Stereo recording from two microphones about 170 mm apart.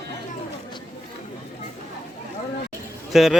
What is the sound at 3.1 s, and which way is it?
Speech, centre (ahead or behind).